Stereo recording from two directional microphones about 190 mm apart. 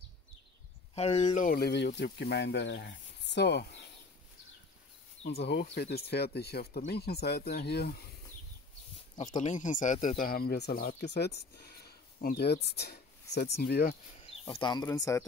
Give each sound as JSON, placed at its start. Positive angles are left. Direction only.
{"t": 0.9, "sound": "speech", "side_deg": 35}
{"t": 1.3, "sound": "speech", "side_deg": 45}
{"t": 5.2, "sound": "speech", "side_deg": 60}
{"t": 9.4, "sound": "speech", "side_deg": 40}
{"t": 14.5, "sound": "speech", "side_deg": 25}